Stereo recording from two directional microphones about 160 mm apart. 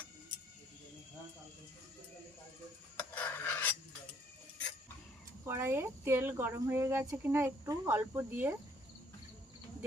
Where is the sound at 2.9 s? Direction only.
10° left (ahead or behind).